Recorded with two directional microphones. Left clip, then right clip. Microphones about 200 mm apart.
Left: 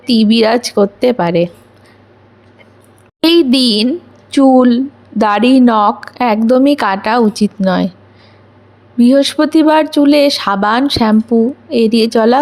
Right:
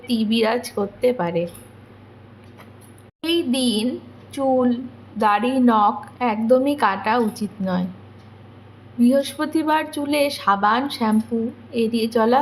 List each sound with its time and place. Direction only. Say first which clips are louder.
0.0 s speech: left 10 dB; 40° left (ahead or behind)
3.2 s a woman's voice: left 12 dB; 45° left (ahead or behind)
9.0 s speech: left 9 dB; 40° left (ahead or behind)